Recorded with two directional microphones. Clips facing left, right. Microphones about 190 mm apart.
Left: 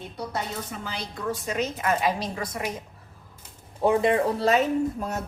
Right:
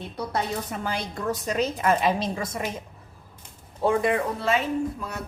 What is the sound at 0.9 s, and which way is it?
Speech, 50° right (ahead or behind).